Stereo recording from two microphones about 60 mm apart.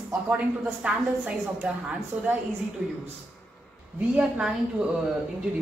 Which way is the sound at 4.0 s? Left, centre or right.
Centre.